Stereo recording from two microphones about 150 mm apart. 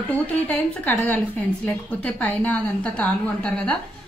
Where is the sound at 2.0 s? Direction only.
10° left (ahead or behind).